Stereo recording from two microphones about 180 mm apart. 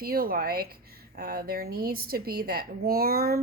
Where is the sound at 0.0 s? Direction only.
55° right (ahead or behind).